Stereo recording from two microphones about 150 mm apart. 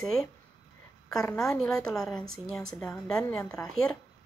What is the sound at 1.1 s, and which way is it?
Speech, 15° left (ahead or behind).